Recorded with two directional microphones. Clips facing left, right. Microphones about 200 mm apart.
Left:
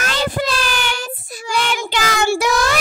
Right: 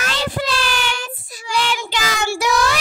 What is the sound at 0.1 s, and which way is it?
Child singing, 50° left (ahead or behind).